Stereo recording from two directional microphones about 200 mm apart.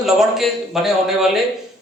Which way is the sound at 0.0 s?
Centre (ahead or behind).